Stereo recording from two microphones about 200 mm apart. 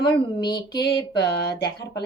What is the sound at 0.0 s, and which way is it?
Speech, 20° left (ahead or behind).